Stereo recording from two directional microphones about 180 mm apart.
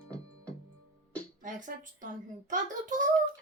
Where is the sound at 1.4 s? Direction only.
45° right (ahead or behind).